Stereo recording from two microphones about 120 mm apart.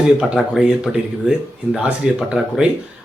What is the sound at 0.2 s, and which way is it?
Speech, 5° right (ahead or behind).